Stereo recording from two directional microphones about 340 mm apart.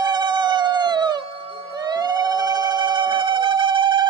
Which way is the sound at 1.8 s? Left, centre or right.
Centre.